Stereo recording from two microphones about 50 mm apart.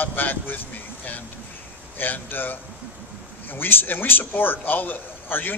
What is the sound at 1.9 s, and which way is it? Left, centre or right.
A man's voice, left.